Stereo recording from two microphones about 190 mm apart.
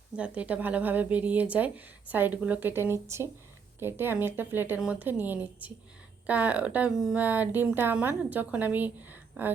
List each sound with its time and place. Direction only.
0.2 s speech: 5° right (ahead or behind)